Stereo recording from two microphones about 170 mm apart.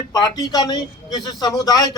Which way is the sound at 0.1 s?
20° left (ahead or behind).